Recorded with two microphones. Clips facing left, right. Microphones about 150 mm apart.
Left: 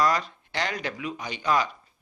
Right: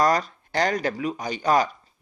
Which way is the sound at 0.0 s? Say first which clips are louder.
Right 3 dB; 40° right (ahead or behind).